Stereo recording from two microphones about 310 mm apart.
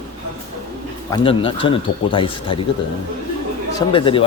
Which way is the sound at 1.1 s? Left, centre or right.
Centre.